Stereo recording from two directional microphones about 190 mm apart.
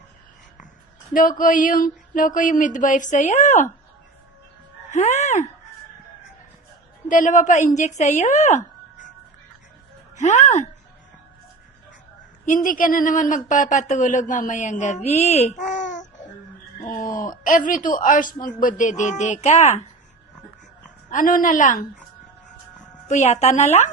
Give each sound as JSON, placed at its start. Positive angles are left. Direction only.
{"t": 1.4, "sound": "speech", "side_deg": 45}
{"t": 4.9, "sound": "music", "side_deg": 35}
{"t": 7.1, "sound": "speech", "side_deg": 45}
{"t": 10.2, "sound": "speech", "side_deg": 35}
{"t": 12.5, "sound": "speech", "side_deg": 45}
{"t": 21.1, "sound": "speech", "side_deg": 45}
{"t": 23.0, "sound": "speech", "side_deg": 40}